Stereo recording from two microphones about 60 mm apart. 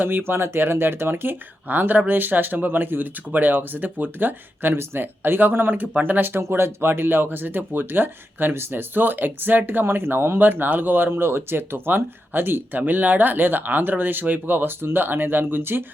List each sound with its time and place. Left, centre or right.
0.0 s speech: right